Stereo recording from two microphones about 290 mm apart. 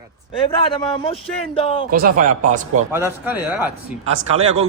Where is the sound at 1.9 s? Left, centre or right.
Right.